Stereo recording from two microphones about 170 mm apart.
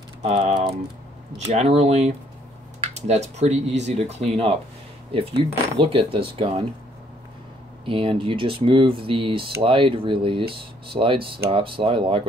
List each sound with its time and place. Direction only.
0.2 s speech: 40° right (ahead or behind)
7.8 s speech: 30° right (ahead or behind)